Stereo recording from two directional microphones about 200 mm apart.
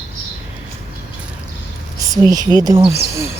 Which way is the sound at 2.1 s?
20° right (ahead or behind).